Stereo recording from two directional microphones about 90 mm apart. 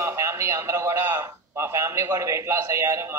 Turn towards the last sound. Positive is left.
turn(degrees=-30)  # may be behind; listen again after turning